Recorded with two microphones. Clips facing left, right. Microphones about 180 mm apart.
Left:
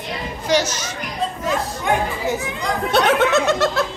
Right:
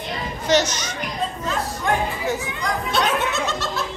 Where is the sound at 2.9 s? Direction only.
80° left.